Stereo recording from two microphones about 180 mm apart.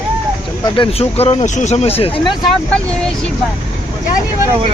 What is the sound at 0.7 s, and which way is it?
Speech, 35° left (ahead or behind).